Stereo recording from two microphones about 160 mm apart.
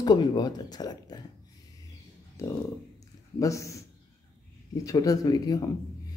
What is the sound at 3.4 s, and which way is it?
Speech, 20° left (ahead or behind).